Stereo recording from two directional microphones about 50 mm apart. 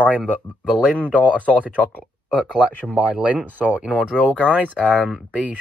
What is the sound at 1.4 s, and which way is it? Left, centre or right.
Speech, right.